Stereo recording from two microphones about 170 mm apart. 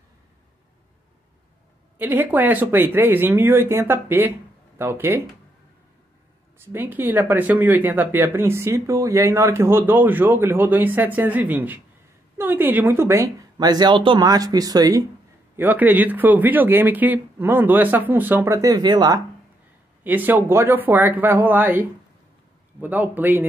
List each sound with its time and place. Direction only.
2.0 s speech: 10° right (ahead or behind)
6.6 s speech: 10° right (ahead or behind)
15.5 s speech: 10° right (ahead or behind)
20.0 s speech: 10° right (ahead or behind)